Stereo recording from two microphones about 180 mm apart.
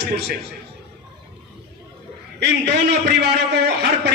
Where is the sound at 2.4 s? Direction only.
65° right (ahead or behind).